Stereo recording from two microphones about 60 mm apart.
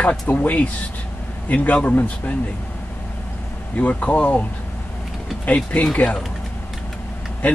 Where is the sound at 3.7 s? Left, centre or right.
Left.